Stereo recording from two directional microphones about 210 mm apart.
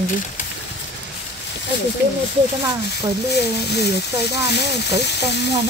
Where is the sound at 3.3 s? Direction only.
50° left (ahead or behind).